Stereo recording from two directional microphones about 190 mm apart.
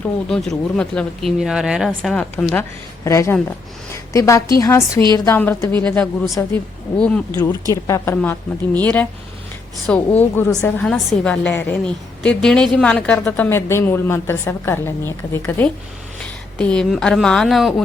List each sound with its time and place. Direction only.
0.3 s a woman's voice: 5° left (ahead or behind)
7.7 s a woman's voice: 15° left (ahead or behind)
10.2 s a woman's voice: 15° left (ahead or behind)